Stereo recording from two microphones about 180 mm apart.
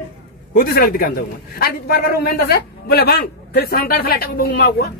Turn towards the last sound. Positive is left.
turn(degrees=65)  # may be behind; listen again after turning